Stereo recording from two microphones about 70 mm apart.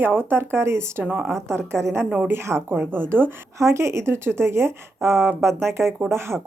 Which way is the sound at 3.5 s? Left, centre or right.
Right.